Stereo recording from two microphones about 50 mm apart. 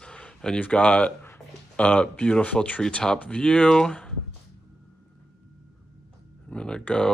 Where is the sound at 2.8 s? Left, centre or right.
Centre.